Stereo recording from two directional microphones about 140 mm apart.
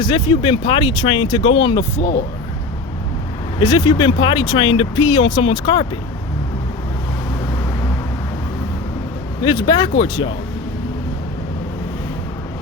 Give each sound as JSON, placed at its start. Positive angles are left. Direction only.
{"t": 0.0, "sound": "speech", "side_deg": 35}
{"t": 2.0, "sound": "speech", "side_deg": 90}
{"t": 3.6, "sound": "speech", "side_deg": 25}
{"t": 9.4, "sound": "speech", "side_deg": 30}